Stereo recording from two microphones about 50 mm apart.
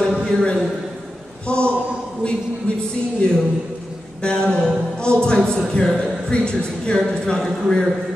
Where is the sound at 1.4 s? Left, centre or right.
Left.